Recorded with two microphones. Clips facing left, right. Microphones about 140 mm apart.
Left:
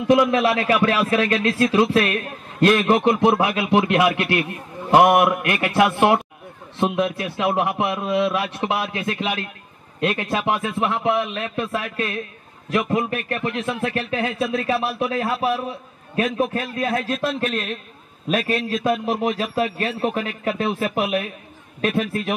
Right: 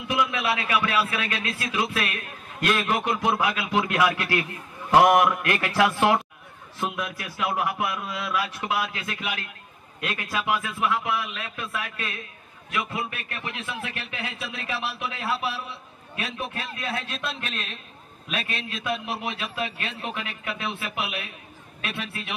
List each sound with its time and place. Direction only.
0.0 s a man's voice: 40° left (ahead or behind)
18.3 s speech: 40° left (ahead or behind)